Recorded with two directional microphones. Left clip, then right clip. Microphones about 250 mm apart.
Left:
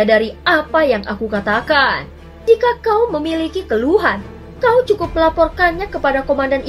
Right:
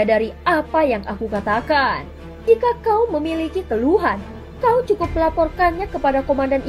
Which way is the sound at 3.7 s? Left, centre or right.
Right.